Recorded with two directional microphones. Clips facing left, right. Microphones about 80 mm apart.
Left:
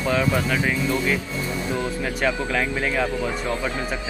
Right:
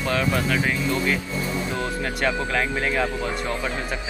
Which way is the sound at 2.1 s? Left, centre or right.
Centre.